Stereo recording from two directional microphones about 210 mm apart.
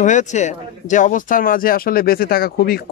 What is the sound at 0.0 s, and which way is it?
Speech, 35° left (ahead or behind).